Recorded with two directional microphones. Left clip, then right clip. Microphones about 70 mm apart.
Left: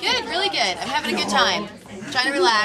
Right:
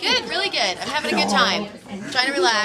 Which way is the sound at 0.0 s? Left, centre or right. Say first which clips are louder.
Even; centre.